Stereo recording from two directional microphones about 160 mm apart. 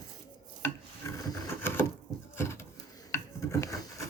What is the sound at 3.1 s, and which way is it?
Filing, 20° left (ahead or behind).